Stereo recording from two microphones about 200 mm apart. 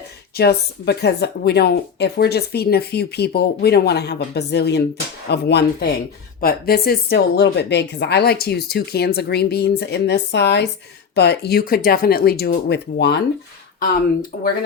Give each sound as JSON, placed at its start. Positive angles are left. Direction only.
{"t": 0.3, "sound": "speech", "side_deg": 55}